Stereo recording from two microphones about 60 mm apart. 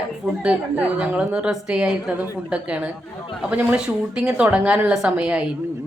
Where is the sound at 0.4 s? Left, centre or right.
Centre.